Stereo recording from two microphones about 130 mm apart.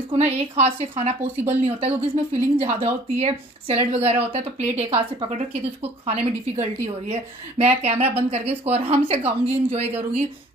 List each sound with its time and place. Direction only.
0.2 s a woman's voice: 55° right (ahead or behind)